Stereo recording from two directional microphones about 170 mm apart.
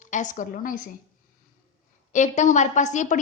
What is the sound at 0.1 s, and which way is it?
Speech, 45° left (ahead or behind).